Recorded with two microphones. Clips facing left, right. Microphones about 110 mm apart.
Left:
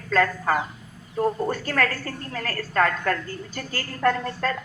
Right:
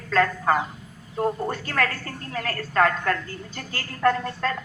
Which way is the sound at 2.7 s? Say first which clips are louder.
Right 1 dB; 40° right (ahead or behind).